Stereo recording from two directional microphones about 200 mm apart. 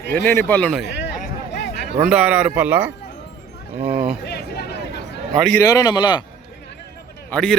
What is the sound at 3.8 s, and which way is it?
Speech, 30° right (ahead or behind).